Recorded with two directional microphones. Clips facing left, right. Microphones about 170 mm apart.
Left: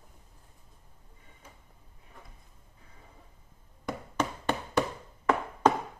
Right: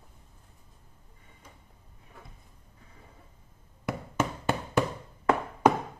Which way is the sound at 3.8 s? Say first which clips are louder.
Right 2 dB; 5° right (ahead or behind).